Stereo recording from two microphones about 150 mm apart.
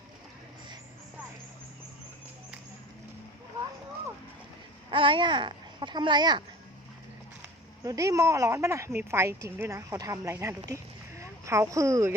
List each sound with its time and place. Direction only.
4.9 s a child's voice: 35° right (ahead or behind)
7.9 s a woman's voice: 25° right (ahead or behind)